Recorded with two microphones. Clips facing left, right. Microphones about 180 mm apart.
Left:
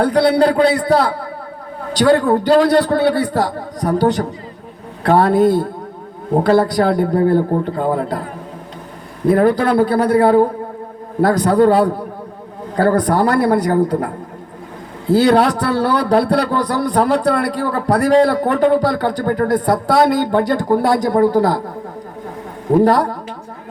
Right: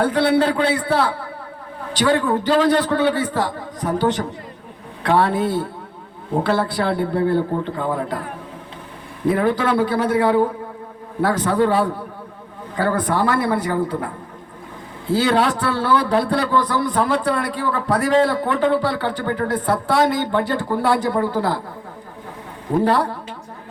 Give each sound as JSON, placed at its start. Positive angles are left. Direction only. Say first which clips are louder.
{"t": 0.0, "sound": "a man's voice", "louder": "left 4 dB", "side_deg": 40}
{"t": 9.3, "sound": "a man's voice", "louder": "left 6 dB", "side_deg": 40}
{"t": 22.8, "sound": "a man's voice", "louder": "left 4 dB", "side_deg": 40}